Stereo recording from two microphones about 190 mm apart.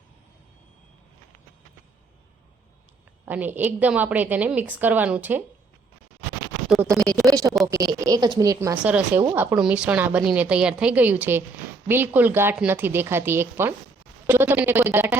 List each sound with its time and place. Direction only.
3.2 s a woman's voice: 10° right (ahead or behind)
6.8 s a woman's voice: 15° right (ahead or behind)